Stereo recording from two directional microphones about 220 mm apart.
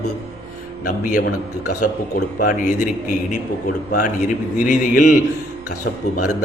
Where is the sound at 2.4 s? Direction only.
35° left (ahead or behind).